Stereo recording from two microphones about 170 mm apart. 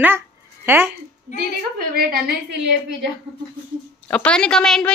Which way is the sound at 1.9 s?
60° right (ahead or behind).